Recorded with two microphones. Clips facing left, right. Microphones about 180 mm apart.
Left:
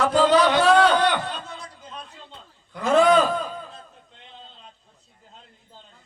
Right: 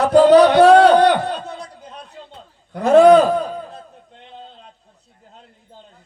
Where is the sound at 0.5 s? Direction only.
65° right (ahead or behind).